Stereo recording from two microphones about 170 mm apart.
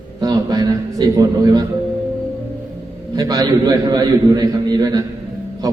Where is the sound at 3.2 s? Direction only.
20° right (ahead or behind).